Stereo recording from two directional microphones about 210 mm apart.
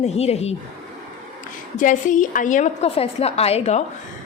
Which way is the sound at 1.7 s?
40° left (ahead or behind).